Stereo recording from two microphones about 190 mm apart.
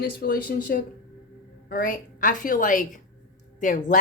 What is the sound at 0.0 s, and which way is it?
Speech, 50° left (ahead or behind).